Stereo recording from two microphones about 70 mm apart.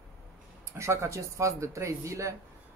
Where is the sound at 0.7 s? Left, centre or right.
Right.